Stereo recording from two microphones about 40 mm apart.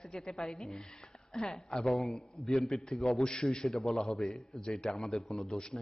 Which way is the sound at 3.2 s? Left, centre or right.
Left.